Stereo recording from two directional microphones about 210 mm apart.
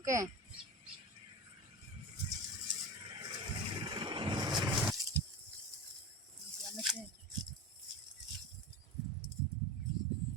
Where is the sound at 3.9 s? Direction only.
20° right (ahead or behind).